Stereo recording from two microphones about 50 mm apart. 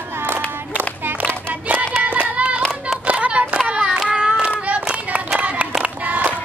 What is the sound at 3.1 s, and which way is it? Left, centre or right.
Child singing, right.